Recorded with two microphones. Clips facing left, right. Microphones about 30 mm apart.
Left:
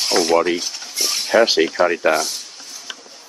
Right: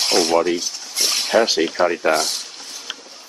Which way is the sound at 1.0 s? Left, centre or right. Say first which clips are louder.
Right 2 dB; right.